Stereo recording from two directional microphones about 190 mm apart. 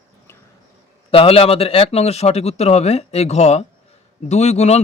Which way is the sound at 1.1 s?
30° left (ahead or behind).